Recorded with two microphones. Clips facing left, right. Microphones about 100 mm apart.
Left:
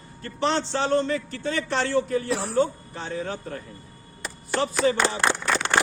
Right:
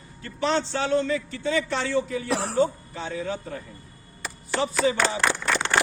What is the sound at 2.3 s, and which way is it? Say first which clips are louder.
Speech: right 1 dB; 75° right (ahead or behind).